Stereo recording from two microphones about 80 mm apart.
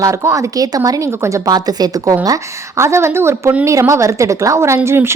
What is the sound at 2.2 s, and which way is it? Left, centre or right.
A woman's voice, right.